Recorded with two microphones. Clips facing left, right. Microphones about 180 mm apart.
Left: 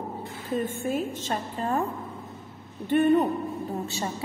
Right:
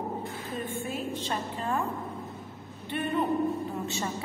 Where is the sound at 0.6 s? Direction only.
45° left (ahead or behind).